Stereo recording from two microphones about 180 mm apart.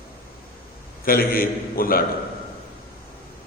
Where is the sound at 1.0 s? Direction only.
55° left (ahead or behind).